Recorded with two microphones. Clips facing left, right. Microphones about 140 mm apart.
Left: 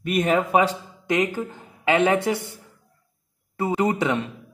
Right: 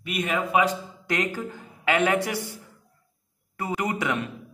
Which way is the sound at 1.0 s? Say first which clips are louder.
Left 5 dB; 20° left (ahead or behind).